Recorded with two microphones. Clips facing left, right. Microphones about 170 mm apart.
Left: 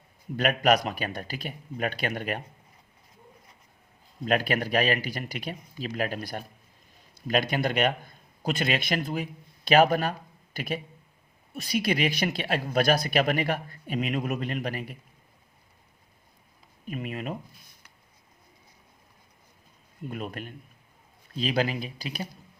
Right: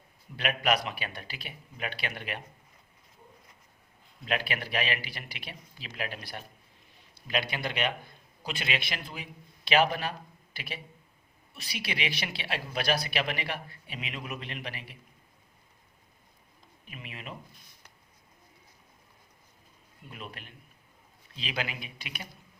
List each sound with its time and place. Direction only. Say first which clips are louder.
0.3 s speech: left 6 dB; 45° left (ahead or behind)
4.3 s a man's voice: left 7 dB; 45° left (ahead or behind)
16.8 s speech: left 11 dB; 45° left (ahead or behind)
20.1 s speech: left 9 dB; 45° left (ahead or behind)